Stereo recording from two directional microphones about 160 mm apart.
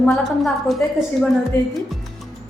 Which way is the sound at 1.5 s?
15° left (ahead or behind).